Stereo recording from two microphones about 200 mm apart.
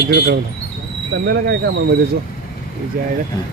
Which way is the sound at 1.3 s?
55° right (ahead or behind).